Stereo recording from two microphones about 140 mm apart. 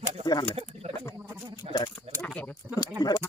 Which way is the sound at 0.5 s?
45° right (ahead or behind).